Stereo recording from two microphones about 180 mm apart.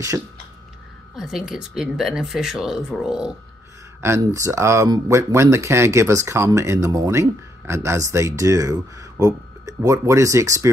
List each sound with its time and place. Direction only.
1.1 s speech: centre (ahead or behind)
4.0 s speech: 15° right (ahead or behind)